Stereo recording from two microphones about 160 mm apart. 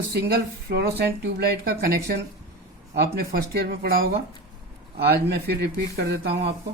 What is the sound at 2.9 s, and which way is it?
Speech, 75° right (ahead or behind).